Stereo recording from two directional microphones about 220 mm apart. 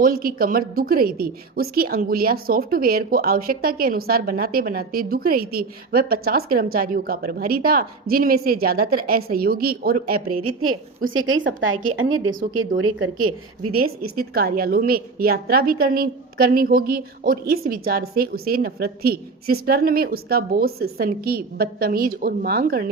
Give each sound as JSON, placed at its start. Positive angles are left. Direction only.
{"t": 0.0, "sound": "a woman's voice", "side_deg": -40}
{"t": 10.6, "sound": "a woman's voice", "side_deg": -70}
{"t": 13.7, "sound": "a woman's voice", "side_deg": -45}